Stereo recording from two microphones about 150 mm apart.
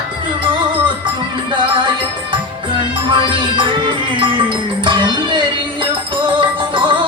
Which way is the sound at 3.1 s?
35° right (ahead or behind).